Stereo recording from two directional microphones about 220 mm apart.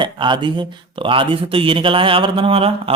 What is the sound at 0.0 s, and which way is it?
A man's voice, 20° right (ahead or behind).